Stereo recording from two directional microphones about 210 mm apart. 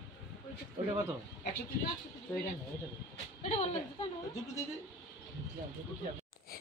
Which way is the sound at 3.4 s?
30° left (ahead or behind).